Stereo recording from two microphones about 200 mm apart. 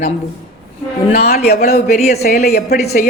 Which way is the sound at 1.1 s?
50° left (ahead or behind).